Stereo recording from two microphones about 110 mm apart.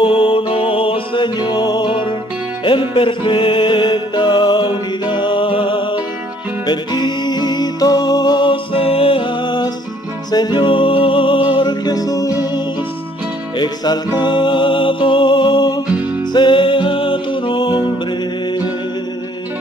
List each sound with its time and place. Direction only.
0.0 s music: 50° left (ahead or behind)